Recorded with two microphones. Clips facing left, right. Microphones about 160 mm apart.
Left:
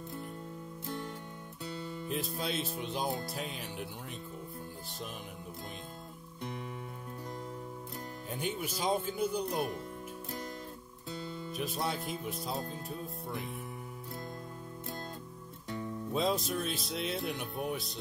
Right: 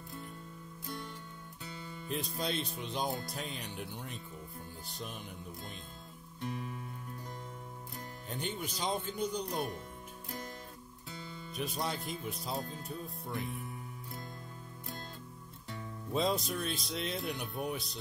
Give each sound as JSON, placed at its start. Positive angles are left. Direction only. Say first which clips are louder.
{"t": 2.0, "sound": "speech", "louder": "even", "side_deg": 0}
{"t": 8.3, "sound": "speech", "louder": "left 2 dB", "side_deg": 5}
{"t": 11.5, "sound": "speech", "louder": "left 1 dB", "side_deg": 0}
{"t": 16.1, "sound": "speech", "louder": "even", "side_deg": 0}